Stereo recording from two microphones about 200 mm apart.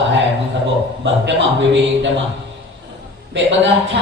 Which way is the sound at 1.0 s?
65° right (ahead or behind).